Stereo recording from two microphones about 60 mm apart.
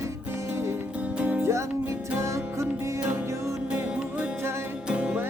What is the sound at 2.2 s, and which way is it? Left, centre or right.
Music, right.